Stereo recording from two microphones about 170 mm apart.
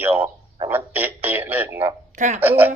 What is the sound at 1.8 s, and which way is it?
Speech, 45° right (ahead or behind).